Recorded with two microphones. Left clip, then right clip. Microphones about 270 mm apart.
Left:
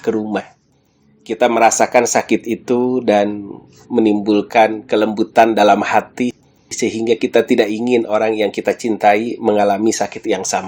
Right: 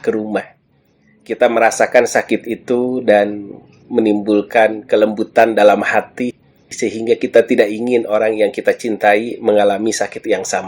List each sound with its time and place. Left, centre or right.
1.3 s speech: left